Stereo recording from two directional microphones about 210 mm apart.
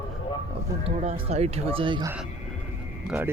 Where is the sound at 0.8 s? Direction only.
30° right (ahead or behind).